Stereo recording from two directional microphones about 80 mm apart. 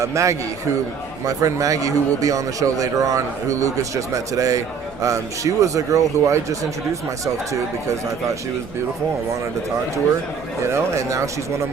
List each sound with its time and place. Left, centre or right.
0.0 s a man's voice: right
10.7 s speech: right